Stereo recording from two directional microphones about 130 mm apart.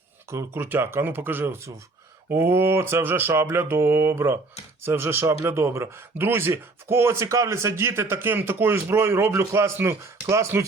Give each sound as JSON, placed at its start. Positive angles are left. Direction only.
{"t": 0.3, "sound": "speech", "side_deg": -20}